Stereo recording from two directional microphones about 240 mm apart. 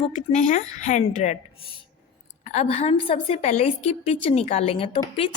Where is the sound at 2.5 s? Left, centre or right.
Left.